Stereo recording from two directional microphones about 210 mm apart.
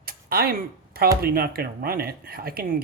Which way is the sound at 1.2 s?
45° right (ahead or behind).